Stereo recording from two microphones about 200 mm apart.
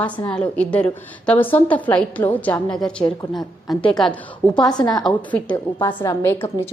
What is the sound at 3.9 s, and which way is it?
A woman's voice, 5° left (ahead or behind).